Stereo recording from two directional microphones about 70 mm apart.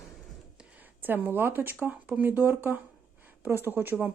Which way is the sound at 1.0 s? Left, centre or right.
Right.